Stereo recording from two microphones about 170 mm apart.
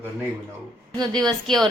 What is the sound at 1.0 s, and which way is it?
Speech, 25° right (ahead or behind).